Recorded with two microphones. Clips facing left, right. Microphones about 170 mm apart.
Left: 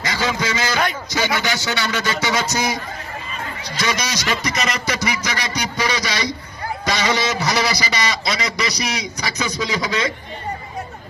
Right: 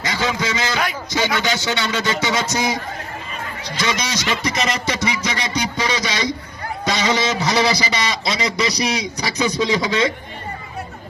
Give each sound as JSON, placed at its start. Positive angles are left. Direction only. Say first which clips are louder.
{"t": 0.0, "sound": "a man's voice", "louder": "even", "side_deg": -20}
{"t": 3.8, "sound": "a man's voice", "louder": "even", "side_deg": -20}